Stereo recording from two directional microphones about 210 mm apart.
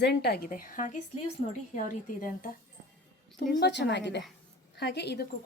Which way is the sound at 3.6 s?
55° left (ahead or behind).